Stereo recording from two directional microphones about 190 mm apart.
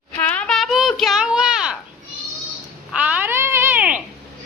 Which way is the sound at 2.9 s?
10° right (ahead or behind).